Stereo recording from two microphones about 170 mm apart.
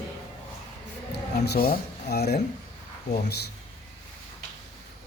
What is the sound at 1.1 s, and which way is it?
Speech, 70° left (ahead or behind).